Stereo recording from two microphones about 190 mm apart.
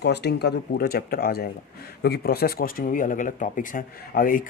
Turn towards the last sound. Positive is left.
turn(degrees=45)  # may be behind; listen again after turning